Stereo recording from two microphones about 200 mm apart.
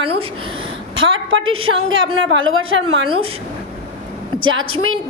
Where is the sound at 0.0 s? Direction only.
30° right (ahead or behind).